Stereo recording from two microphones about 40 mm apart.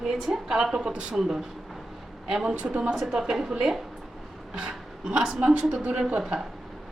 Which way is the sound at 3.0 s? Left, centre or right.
Centre.